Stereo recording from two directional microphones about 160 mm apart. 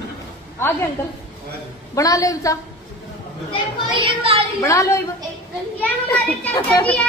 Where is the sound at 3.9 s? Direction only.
30° right (ahead or behind).